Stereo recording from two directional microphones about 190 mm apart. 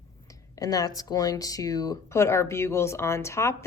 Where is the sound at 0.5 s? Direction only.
20° left (ahead or behind).